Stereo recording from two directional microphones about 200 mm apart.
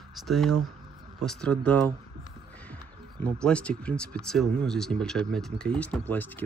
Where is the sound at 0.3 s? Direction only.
Centre (ahead or behind).